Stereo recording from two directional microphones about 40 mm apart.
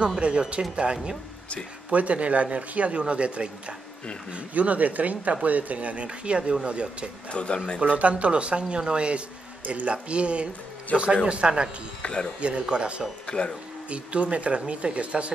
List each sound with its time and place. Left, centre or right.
0.2 s speech: right
7.2 s speech: left
7.8 s speech: right
12.0 s speech: left
12.4 s speech: right